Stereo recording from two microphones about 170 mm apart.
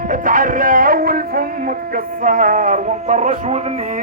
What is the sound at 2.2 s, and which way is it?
Music, 50° right (ahead or behind).